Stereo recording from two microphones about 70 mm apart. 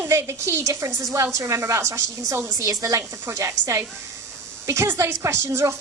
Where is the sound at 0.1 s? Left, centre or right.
Right.